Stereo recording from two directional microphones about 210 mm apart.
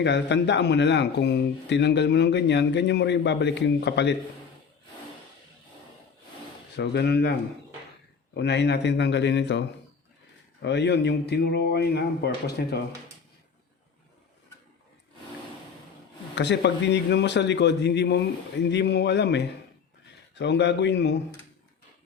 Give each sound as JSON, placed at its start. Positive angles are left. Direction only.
{"t": 0.0, "sound": "speech", "side_deg": 55}
{"t": 6.7, "sound": "speech", "side_deg": 50}
{"t": 16.3, "sound": "speech", "side_deg": 55}